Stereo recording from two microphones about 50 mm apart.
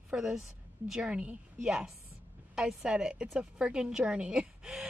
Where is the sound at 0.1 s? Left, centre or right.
Centre.